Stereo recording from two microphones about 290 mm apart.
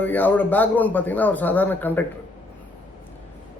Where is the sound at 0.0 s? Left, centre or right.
Centre.